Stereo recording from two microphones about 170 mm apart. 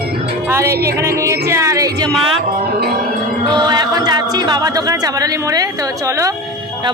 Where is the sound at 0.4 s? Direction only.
15° right (ahead or behind).